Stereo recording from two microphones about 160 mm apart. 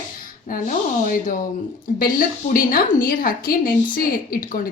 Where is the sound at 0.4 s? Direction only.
55° left (ahead or behind).